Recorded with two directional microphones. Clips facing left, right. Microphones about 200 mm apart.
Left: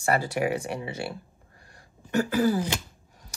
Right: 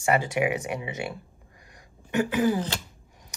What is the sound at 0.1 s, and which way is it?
Speech, 40° left (ahead or behind).